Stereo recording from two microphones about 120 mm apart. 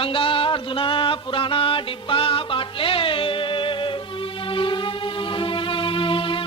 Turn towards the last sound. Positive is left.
turn(degrees=45)  # may be behind; listen again after turning